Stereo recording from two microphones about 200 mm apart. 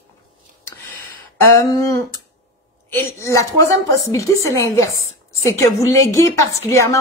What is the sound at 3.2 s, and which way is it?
A woman's voice, 15° left (ahead or behind).